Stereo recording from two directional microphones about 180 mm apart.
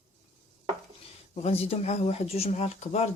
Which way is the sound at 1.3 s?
35° left (ahead or behind).